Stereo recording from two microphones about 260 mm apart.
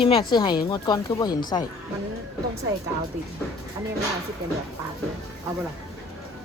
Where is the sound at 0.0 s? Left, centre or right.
Centre.